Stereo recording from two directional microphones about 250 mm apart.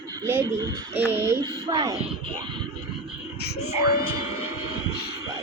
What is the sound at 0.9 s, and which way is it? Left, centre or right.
Speech, centre.